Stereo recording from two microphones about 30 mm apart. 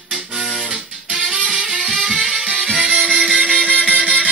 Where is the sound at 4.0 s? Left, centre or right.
Right.